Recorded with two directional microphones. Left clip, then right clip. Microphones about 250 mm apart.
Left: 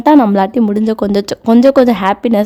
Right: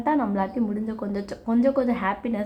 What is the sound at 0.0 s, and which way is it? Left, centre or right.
A woman's voice, left.